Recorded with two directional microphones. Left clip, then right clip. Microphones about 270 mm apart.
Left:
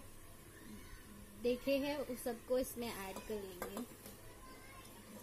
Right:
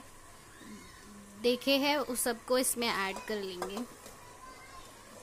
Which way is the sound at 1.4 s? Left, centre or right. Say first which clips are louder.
Right 8 dB; right.